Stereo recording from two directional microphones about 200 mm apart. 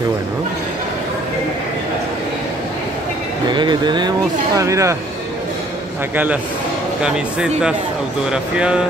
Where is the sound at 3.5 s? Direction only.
20° right (ahead or behind).